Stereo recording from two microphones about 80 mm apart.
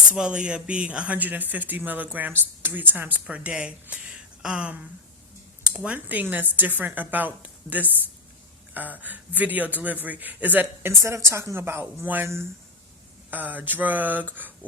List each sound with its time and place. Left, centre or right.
0.1 s a woman's voice: centre
11.0 s speech: right
13.3 s a woman's voice: right